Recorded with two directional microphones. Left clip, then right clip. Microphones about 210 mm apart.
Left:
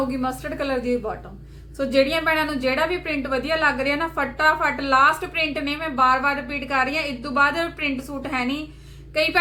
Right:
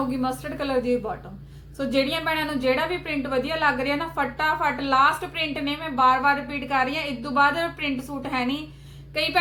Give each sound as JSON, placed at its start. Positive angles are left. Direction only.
{"t": 0.2, "sound": "a woman's voice", "side_deg": 15}